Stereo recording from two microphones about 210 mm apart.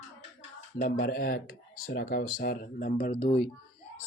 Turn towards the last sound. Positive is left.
turn(degrees=30)  # may be behind; listen again after turning